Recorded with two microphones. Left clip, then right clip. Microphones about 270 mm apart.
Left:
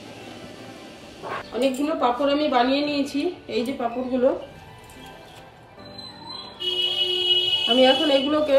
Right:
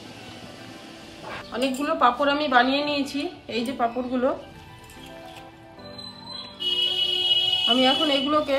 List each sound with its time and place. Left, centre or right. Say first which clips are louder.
1.3 s speech: left 3 dB; centre
6.6 s music: even; centre